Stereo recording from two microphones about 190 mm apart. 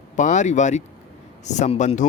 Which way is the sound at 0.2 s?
40° left (ahead or behind).